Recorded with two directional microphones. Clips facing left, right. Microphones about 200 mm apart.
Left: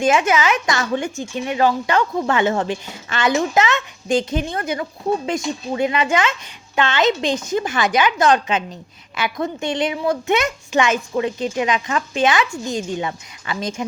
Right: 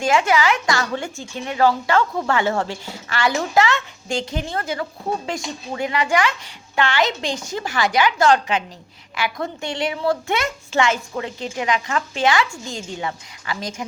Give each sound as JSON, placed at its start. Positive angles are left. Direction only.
{"t": 0.0, "sound": "speech", "side_deg": 20}